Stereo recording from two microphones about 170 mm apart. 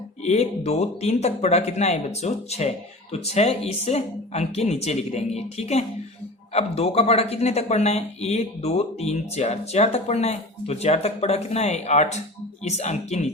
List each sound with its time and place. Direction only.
0.3 s speech: 40° left (ahead or behind)